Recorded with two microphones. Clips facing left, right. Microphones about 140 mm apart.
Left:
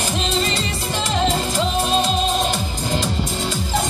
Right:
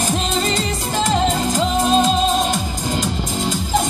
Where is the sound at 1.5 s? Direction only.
45° right (ahead or behind).